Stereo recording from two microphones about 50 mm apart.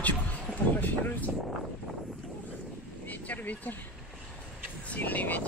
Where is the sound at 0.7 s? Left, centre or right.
Left.